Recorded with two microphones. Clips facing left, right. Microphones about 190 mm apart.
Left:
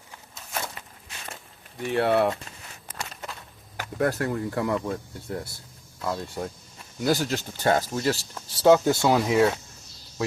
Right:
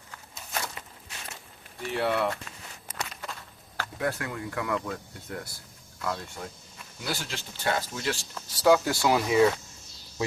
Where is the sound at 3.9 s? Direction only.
40° left (ahead or behind).